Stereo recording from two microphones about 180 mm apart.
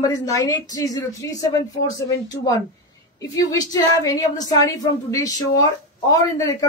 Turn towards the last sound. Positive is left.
turn(degrees=20)  # may be behind; listen again after turning